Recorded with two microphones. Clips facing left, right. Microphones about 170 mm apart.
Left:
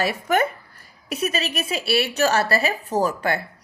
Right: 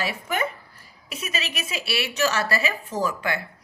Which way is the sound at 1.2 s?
35° left (ahead or behind).